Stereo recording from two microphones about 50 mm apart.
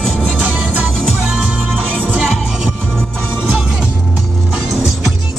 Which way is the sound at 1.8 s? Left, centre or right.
Right.